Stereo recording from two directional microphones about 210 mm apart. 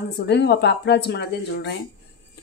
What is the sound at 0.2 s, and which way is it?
Speech, 55° left (ahead or behind).